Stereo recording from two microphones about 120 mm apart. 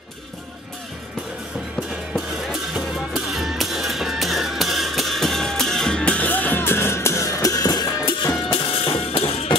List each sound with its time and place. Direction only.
2.1 s music: centre (ahead or behind); by 7.8 s 30° left (ahead or behind)
8.5 s music: 45° left (ahead or behind)